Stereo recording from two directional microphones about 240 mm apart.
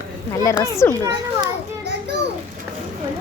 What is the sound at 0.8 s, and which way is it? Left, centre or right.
Speech, centre.